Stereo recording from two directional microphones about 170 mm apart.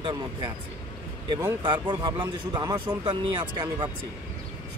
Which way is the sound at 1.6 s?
25° right (ahead or behind).